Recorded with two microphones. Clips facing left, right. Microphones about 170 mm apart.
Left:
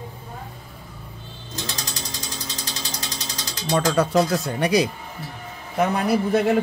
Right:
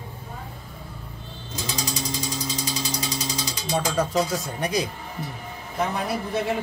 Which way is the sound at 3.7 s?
70° left (ahead or behind).